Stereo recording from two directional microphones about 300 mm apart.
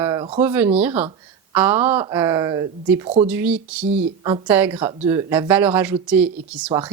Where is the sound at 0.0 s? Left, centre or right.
Centre.